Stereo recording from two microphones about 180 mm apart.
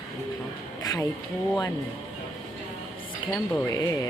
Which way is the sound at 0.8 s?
20° left (ahead or behind).